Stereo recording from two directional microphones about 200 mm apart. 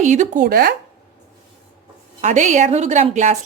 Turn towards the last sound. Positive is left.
turn(degrees=-35)  # may be behind; listen again after turning